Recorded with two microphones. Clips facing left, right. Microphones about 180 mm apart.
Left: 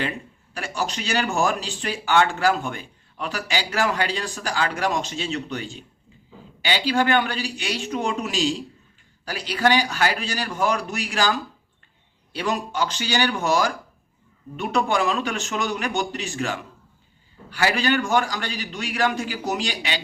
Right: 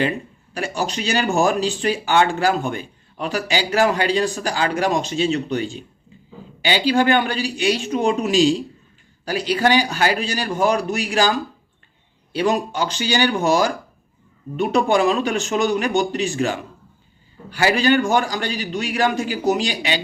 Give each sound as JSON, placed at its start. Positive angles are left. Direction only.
{"t": 0.5, "sound": "a man's voice", "side_deg": -25}
{"t": 6.7, "sound": "a man's voice", "side_deg": -30}
{"t": 12.4, "sound": "a man's voice", "side_deg": -25}